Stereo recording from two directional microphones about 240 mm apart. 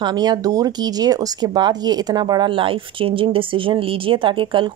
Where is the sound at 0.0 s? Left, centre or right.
Centre.